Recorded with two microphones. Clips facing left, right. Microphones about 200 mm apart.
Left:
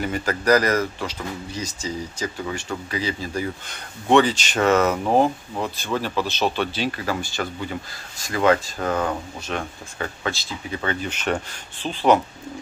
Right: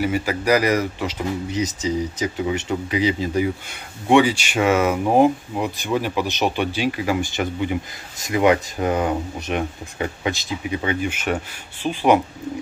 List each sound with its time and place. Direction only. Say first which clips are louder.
0.0 s speech: right 2 dB; 10° right (ahead or behind)